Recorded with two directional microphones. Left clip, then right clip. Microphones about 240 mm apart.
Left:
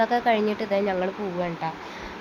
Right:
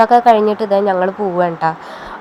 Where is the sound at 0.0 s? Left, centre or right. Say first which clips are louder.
Right 13 dB; right.